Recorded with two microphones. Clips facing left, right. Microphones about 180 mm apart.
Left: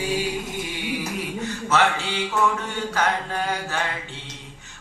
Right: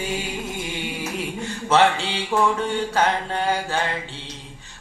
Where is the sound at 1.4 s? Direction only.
30° right (ahead or behind).